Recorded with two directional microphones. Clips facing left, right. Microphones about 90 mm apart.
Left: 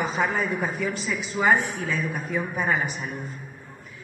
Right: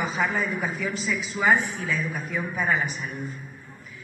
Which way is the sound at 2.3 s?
35° left (ahead or behind).